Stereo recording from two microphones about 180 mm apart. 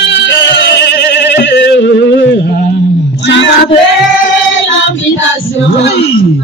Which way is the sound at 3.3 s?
85° left.